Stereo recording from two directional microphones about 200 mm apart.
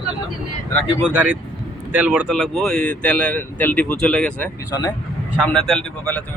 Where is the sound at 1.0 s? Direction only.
10° right (ahead or behind).